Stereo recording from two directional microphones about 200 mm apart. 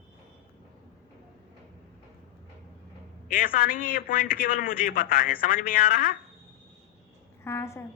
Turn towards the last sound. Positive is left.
turn(degrees=15)  # may be behind; listen again after turning